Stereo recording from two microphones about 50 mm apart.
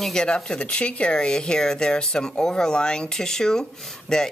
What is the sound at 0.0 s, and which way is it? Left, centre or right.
Speech, centre.